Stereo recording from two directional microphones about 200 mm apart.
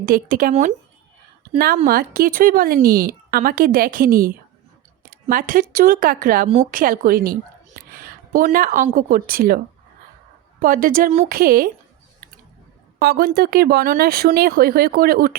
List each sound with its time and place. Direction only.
0.0 s speech: 45° right (ahead or behind)
1.5 s speech: 50° right (ahead or behind)
5.3 s speech: 45° right (ahead or behind)
10.6 s speech: 45° right (ahead or behind)
13.0 s speech: 50° right (ahead or behind)